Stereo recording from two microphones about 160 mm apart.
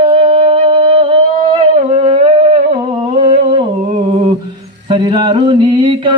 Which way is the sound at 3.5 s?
30° right (ahead or behind).